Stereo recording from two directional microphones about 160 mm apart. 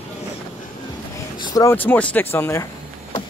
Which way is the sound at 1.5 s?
15° left (ahead or behind).